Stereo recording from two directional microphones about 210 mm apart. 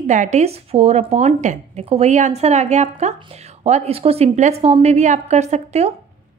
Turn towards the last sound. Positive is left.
turn(degrees=-30)  # may be behind; listen again after turning